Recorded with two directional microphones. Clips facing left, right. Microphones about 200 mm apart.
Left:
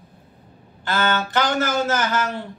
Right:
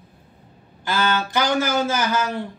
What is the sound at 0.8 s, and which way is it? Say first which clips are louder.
A man's voice: even; 10° right (ahead or behind).